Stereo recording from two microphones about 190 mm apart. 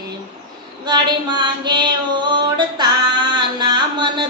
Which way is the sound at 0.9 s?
25° right (ahead or behind).